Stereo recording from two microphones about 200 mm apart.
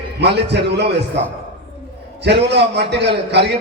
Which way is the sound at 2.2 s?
60° right (ahead or behind).